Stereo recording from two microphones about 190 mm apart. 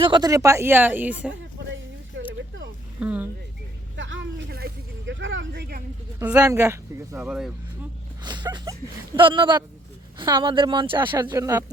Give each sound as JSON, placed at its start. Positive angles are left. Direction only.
{"t": 0.0, "sound": "speech", "side_deg": -20}
{"t": 3.0, "sound": "speech", "side_deg": -5}
{"t": 3.9, "sound": "vehicle", "side_deg": -80}
{"t": 5.2, "sound": "a sound", "side_deg": -75}
{"t": 6.1, "sound": "speech", "side_deg": -10}
{"t": 7.2, "sound": "speech", "side_deg": -5}
{"t": 8.2, "sound": "speech", "side_deg": -20}
{"t": 11.1, "sound": "speech", "side_deg": -15}